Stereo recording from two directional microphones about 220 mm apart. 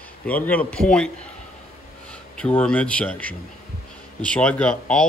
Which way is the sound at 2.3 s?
5° left (ahead or behind).